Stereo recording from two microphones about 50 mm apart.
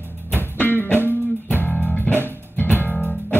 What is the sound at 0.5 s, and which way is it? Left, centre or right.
Music, left.